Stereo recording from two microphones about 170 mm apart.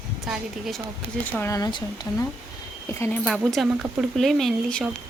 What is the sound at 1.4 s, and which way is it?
Speech, 15° left (ahead or behind).